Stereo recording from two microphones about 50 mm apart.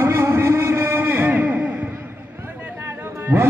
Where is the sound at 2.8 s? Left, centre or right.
Right.